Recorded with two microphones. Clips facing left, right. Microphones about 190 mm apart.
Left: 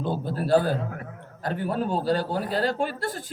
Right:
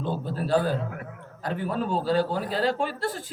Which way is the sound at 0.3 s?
45° left (ahead or behind).